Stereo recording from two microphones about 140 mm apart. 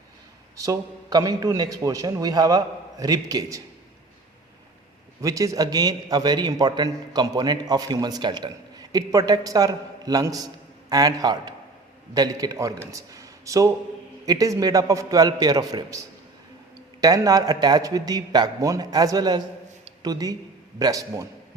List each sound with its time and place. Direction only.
0.5 s a man's voice: 25° right (ahead or behind)
5.2 s a man's voice: 25° right (ahead or behind)